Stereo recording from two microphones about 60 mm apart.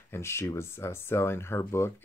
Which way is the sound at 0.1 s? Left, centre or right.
Left.